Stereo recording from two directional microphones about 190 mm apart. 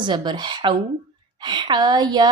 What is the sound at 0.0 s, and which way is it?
A woman's voice, 25° right (ahead or behind).